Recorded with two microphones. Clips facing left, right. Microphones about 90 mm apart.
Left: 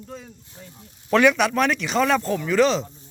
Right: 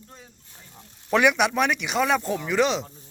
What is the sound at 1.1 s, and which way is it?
Speech, 15° right (ahead or behind).